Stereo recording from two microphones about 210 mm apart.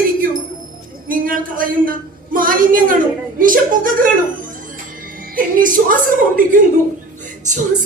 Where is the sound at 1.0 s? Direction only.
40° right (ahead or behind).